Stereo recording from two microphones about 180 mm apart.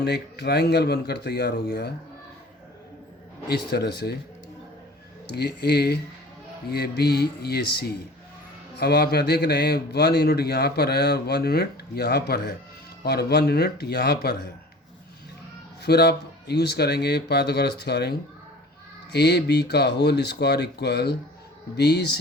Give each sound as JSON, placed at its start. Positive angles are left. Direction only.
{"t": 0.0, "sound": "a man's voice", "side_deg": 65}
{"t": 3.5, "sound": "a man's voice", "side_deg": 65}
{"t": 5.3, "sound": "a man's voice", "side_deg": 65}
{"t": 15.8, "sound": "a man's voice", "side_deg": 65}
{"t": 19.1, "sound": "a man's voice", "side_deg": 65}